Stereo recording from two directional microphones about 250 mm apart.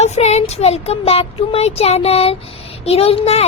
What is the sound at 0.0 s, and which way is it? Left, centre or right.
Speech, left.